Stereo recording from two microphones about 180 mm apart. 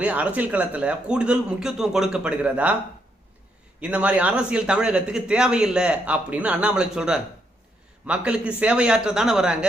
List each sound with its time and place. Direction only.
0.0 s a man's voice: 10° right (ahead or behind)
3.8 s a man's voice: 5° right (ahead or behind)